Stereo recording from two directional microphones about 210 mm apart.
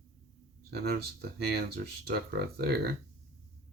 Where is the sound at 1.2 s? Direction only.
50° right (ahead or behind).